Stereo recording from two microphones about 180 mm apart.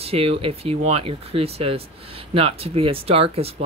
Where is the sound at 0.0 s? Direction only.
35° right (ahead or behind).